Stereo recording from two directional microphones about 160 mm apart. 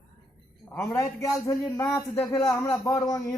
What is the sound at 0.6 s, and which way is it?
Speech, 15° left (ahead or behind).